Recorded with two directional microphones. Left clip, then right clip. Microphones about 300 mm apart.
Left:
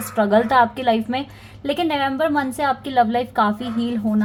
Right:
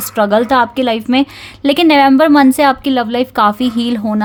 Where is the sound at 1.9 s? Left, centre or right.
Right.